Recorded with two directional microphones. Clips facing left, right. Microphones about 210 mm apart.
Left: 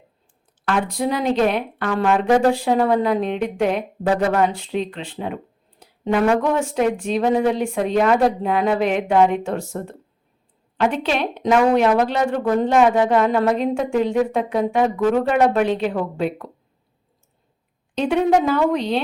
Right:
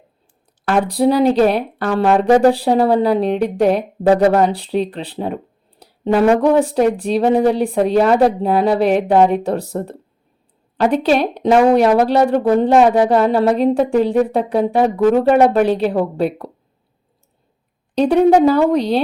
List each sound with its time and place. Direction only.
0.7 s a woman's voice: 35° right (ahead or behind)
5.8 s a sound: 35° right (ahead or behind)
6.4 s a woman's voice: 35° right (ahead or behind)
17.9 s a woman's voice: 35° right (ahead or behind)